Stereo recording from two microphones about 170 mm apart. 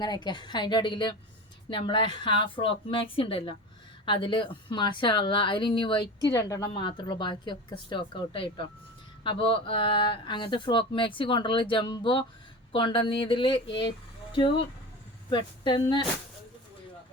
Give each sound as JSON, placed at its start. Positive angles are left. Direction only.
{"t": 0.0, "sound": "a woman's voice", "side_deg": 25}
{"t": 15.3, "sound": "a woman's voice", "side_deg": 30}